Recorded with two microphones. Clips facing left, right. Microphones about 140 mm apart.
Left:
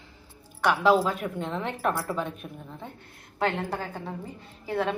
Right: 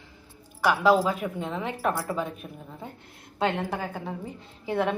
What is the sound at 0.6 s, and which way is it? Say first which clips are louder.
A woman's voice: right 1 dB; 5° right (ahead or behind).